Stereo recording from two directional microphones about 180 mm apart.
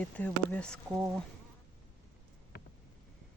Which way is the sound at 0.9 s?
5° right (ahead or behind).